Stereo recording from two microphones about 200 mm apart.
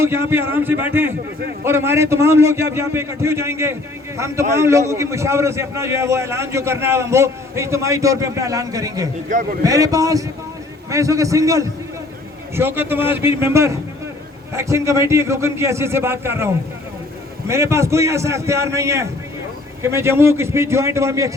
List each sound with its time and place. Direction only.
0.0 s a man's voice: 10° right (ahead or behind)
9.3 s speech: 40° right (ahead or behind)
9.6 s a man's voice: 15° right (ahead or behind)
17.5 s a man's voice: 15° right (ahead or behind)